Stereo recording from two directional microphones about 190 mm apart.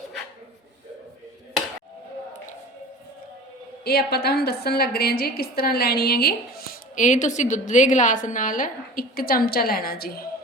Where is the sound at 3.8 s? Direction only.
55° left (ahead or behind).